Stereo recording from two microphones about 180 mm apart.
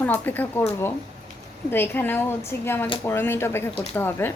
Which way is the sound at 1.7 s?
10° left (ahead or behind).